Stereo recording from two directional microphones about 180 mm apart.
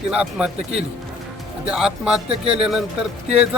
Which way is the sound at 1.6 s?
5° right (ahead or behind).